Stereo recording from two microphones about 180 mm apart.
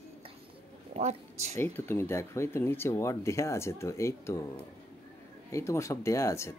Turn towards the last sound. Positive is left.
turn(degrees=15)  # may be behind; listen again after turning